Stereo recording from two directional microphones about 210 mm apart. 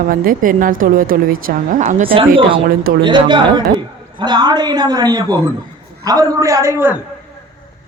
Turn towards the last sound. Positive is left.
turn(degrees=-10)  # may be behind; listen again after turning